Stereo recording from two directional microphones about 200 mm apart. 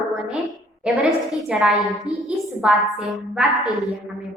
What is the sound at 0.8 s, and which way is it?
A woman's voice, 5° right (ahead or behind).